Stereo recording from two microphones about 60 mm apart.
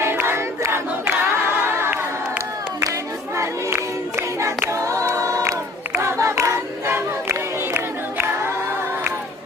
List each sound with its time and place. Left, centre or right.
0.0 s crowd: right
1.0 s a capella: right
4.8 s choir: right
6.0 s a capella: right